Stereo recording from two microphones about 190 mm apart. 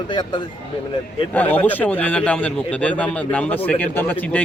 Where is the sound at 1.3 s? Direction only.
10° left (ahead or behind).